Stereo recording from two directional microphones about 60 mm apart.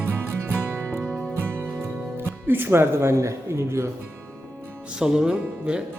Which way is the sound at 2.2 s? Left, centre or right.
Right.